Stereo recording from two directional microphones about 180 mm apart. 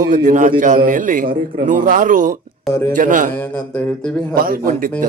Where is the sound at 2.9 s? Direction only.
45° right (ahead or behind).